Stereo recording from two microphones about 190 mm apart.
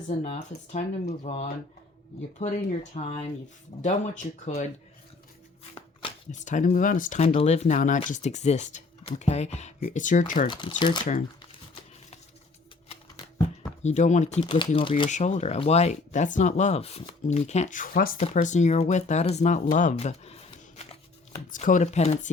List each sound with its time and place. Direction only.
0.1 s speech: 35° left (ahead or behind)
6.0 s speech: 40° left (ahead or behind)
10.8 s speech: 25° left (ahead or behind)
12.9 s shuffling cards: 30° left (ahead or behind)
15.1 s speech: 35° left (ahead or behind)